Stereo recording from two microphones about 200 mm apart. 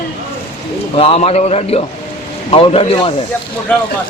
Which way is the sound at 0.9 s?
30° left (ahead or behind).